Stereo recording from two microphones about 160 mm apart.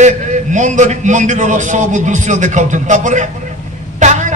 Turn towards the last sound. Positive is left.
turn(degrees=-45)  # may be behind; listen again after turning